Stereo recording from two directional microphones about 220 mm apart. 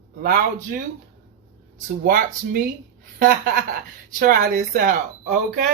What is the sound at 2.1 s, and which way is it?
Speech, 40° right (ahead or behind).